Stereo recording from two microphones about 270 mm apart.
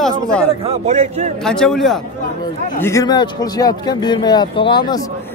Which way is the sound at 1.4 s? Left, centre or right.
Centre.